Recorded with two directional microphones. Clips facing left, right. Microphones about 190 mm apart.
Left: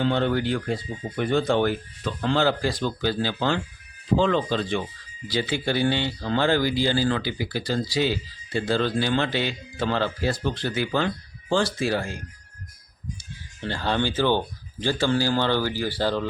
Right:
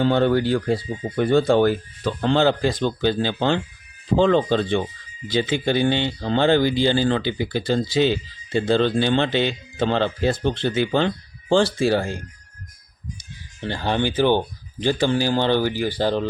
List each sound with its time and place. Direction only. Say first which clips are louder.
0.0 s speech: right 5 dB; 40° right (ahead or behind)
2.2 s speech: right 4 dB; 25° right (ahead or behind)
13.6 s speech: right 2 dB; 15° right (ahead or behind)